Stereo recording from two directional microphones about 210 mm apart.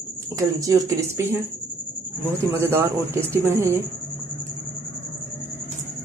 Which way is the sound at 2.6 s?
10° right (ahead or behind).